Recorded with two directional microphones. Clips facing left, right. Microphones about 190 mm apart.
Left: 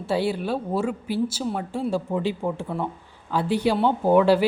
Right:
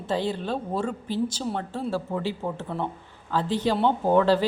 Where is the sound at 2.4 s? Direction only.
5° left (ahead or behind).